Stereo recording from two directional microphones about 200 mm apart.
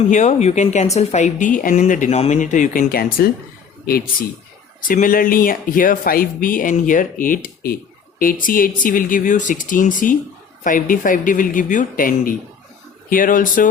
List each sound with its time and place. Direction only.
0.1 s a woman's voice: 35° left (ahead or behind)